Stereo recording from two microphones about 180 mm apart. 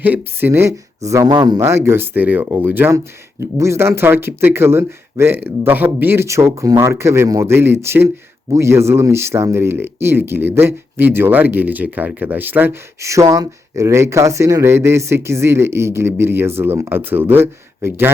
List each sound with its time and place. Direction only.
0.0 s speech: 10° right (ahead or behind)